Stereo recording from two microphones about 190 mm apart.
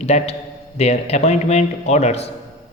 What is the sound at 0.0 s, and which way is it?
A man's voice, 35° left (ahead or behind).